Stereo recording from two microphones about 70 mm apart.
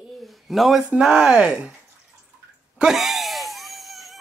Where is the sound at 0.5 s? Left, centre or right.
Centre.